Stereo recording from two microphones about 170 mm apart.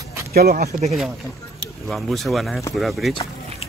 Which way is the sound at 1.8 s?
Centre (ahead or behind).